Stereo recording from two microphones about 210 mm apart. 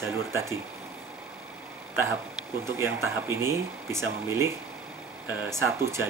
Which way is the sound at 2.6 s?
10° right (ahead or behind).